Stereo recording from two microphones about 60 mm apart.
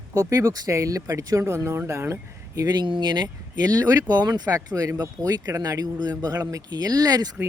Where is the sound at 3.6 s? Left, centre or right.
Right.